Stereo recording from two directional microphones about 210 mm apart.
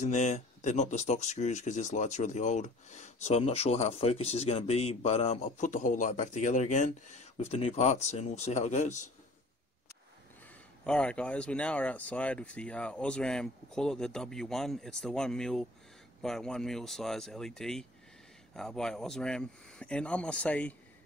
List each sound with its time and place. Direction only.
0.0 s speech: 35° left (ahead or behind)
10.8 s speech: 5° left (ahead or behind)